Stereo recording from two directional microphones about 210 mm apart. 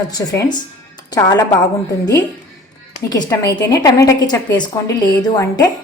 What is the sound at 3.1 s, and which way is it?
A woman's voice, 15° left (ahead or behind).